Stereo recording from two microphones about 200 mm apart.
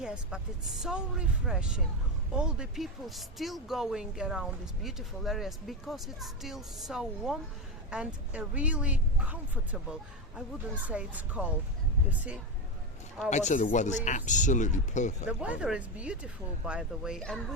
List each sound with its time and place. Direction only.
0.0 s speech: 5° right (ahead or behind)
13.3 s speech: 35° left (ahead or behind)
15.3 s speech: 5° right (ahead or behind)